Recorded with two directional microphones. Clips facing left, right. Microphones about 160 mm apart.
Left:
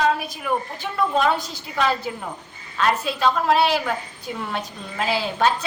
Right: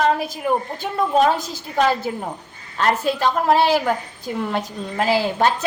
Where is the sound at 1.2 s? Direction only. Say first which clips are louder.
Right 4 dB; 40° right (ahead or behind).